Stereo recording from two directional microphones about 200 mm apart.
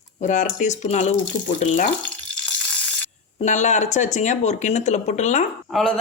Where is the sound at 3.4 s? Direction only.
35° left (ahead or behind).